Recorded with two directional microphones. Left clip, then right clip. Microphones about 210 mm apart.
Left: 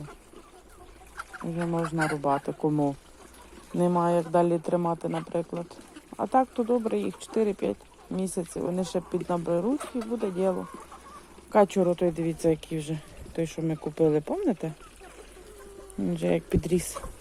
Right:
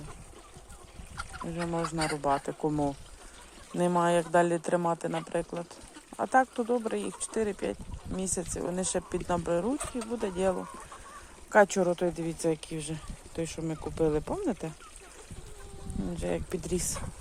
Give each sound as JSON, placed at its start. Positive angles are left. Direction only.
{"t": 1.1, "sound": "chicken", "side_deg": -15}
{"t": 2.0, "sound": "speech", "side_deg": -15}
{"t": 11.5, "sound": "speech", "side_deg": 0}
{"t": 16.1, "sound": "speech", "side_deg": 10}